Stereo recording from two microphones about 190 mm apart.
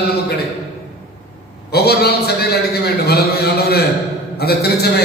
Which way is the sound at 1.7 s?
55° left (ahead or behind).